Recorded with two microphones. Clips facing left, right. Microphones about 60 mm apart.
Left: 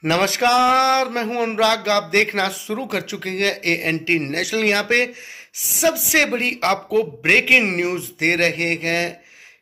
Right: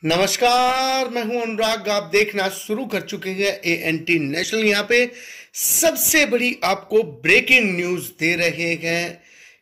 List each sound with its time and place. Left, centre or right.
0.0 s speech: left
1.3 s a man's voice: left
7.6 s speech: left